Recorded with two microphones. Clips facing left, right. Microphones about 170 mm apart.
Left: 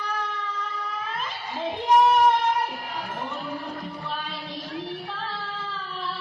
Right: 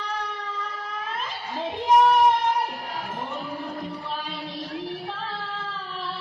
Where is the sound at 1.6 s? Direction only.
Centre (ahead or behind).